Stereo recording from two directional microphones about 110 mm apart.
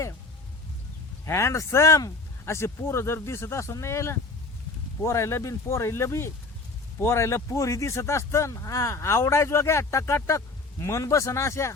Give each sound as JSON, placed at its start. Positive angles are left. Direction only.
{"t": 1.2, "sound": "speech", "side_deg": 25}